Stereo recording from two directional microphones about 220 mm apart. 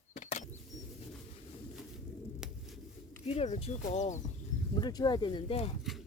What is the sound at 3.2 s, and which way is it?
Speech, 30° left (ahead or behind).